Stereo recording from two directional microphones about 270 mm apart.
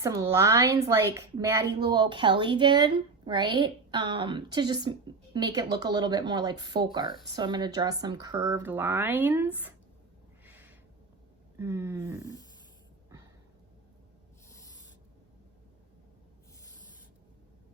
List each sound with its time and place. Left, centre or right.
0.0 s a woman's voice: centre
10.4 s a sound: centre
11.6 s a woman's voice: centre